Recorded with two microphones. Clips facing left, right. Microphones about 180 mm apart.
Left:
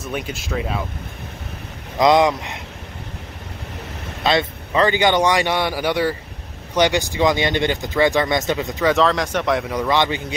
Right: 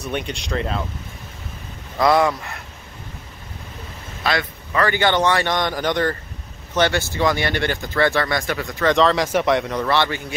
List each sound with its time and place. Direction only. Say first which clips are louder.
0.0 s speech: right 1 dB; 5° left (ahead or behind)
2.0 s speech: left 2 dB; 20° left (ahead or behind)
4.2 s speech: left 4 dB; 25° left (ahead or behind)
8.8 s speech: right 1 dB; centre (ahead or behind)